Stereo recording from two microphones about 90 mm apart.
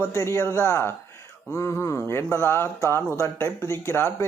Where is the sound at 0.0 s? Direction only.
30° left (ahead or behind).